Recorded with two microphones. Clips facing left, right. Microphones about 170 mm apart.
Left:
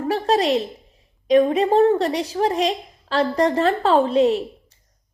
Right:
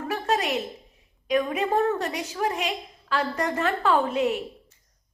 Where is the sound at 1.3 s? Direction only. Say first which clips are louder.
Left 8 dB; 35° left (ahead or behind).